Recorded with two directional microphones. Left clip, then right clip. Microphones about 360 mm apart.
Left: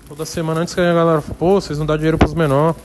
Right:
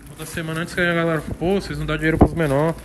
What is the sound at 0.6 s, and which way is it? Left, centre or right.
Speech, centre.